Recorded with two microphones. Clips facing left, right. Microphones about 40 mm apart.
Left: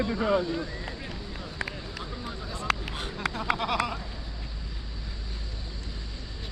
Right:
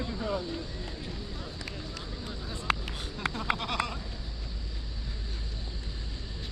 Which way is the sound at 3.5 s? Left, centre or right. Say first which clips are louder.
Left 5 dB; centre.